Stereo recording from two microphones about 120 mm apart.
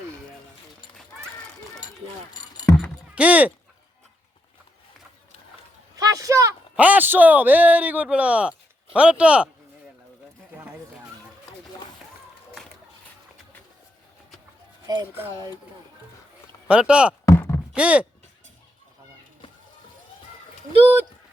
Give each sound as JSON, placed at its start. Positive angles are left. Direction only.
{"t": 3.2, "sound": "a man's voice", "side_deg": -10}
{"t": 6.0, "sound": "a sound", "side_deg": -30}
{"t": 6.7, "sound": "a man's voice", "side_deg": -15}
{"t": 14.9, "sound": "speech", "side_deg": -35}
{"t": 16.6, "sound": "a man's voice", "side_deg": -10}
{"t": 17.2, "sound": "a sound", "side_deg": 20}
{"t": 17.7, "sound": "a man's voice", "side_deg": -10}